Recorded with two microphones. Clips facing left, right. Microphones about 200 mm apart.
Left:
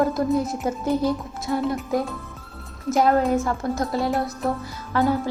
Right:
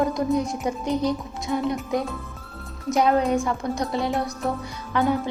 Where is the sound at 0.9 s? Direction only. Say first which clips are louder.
Left 2 dB; 15° right (ahead or behind).